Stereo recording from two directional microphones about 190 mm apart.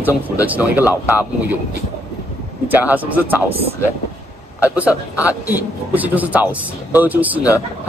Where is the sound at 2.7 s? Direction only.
10° right (ahead or behind).